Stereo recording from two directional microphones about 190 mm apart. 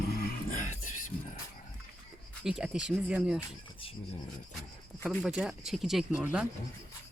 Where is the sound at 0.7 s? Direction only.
40° left (ahead or behind).